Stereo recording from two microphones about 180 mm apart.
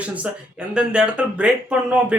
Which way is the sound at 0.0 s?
5° right (ahead or behind).